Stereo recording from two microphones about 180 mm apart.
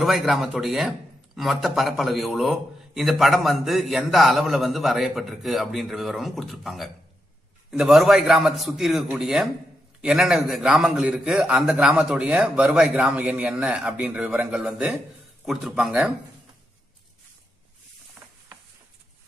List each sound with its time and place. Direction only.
0.0 s speech: centre (ahead or behind)